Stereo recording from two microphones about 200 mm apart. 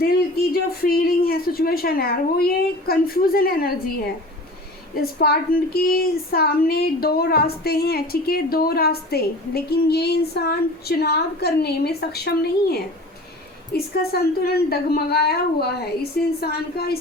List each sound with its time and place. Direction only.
0.5 s a woman's voice: 50° left (ahead or behind)
4.9 s a woman's voice: 50° left (ahead or behind)